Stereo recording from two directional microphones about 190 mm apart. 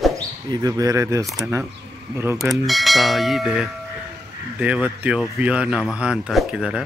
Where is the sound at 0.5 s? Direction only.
20° right (ahead or behind).